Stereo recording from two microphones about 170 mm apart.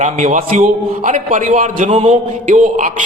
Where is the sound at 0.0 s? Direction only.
50° right (ahead or behind).